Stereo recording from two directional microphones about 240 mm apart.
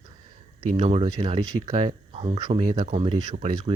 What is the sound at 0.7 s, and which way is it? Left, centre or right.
Speech, right.